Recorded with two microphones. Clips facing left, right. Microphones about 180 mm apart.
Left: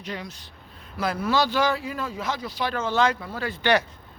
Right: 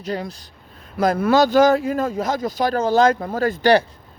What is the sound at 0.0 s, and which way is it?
Speech, 35° right (ahead or behind).